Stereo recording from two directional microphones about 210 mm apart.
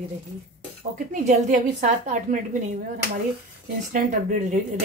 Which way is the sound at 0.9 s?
40° right (ahead or behind).